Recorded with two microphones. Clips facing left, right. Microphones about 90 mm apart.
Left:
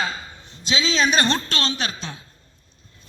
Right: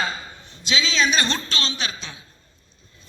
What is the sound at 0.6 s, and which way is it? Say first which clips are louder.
A woman's voice: left 1 dB; 40° left (ahead or behind).